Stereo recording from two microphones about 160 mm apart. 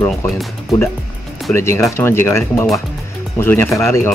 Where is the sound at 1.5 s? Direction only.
15° left (ahead or behind).